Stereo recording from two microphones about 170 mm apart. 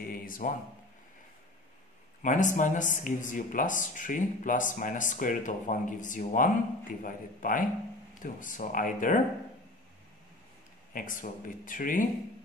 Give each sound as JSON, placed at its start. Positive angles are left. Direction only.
{"t": 0.0, "sound": "a sound", "side_deg": 60}
{"t": 2.2, "sound": "speech", "side_deg": 50}
{"t": 10.9, "sound": "speech", "side_deg": 50}